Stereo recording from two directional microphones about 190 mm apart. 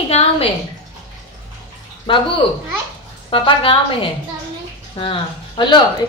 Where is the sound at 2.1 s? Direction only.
25° left (ahead or behind).